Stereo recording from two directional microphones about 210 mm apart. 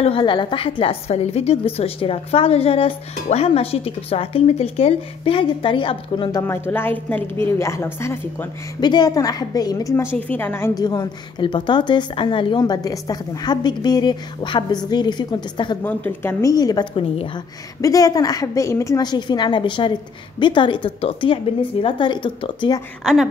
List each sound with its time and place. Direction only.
0.0 s a woman's voice: 25° left (ahead or behind)
6.4 s a woman's voice: 10° left (ahead or behind)
10.0 s a woman's voice: 5° left (ahead or behind); by 15.8 s 20° left (ahead or behind)
15.8 s a woman's voice: 10° left (ahead or behind)